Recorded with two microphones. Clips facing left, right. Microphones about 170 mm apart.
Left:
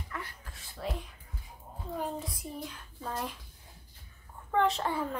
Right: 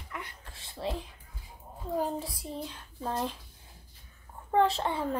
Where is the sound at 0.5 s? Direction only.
25° right (ahead or behind).